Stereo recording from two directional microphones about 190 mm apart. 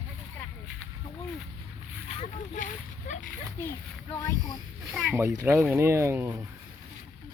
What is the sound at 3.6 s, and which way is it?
A child's voice, 15° left (ahead or behind).